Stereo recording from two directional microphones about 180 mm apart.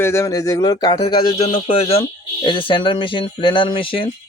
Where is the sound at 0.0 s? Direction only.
15° left (ahead or behind).